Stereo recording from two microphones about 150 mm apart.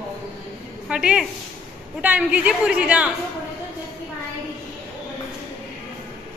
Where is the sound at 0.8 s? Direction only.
5° right (ahead or behind).